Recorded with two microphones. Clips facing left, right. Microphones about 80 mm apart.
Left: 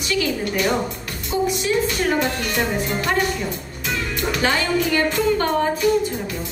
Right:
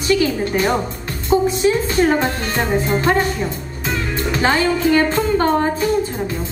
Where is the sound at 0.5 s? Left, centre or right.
Right.